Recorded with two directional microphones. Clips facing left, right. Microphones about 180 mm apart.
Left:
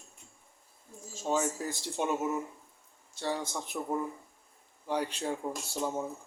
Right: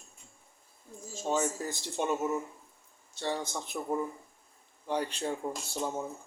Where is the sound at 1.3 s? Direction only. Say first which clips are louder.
Even; 5° left (ahead or behind).